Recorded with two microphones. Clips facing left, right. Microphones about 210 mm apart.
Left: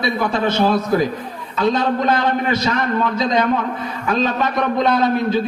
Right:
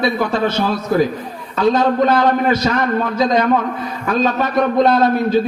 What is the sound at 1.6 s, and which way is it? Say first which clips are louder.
Music: right 4 dB; 55° right (ahead or behind).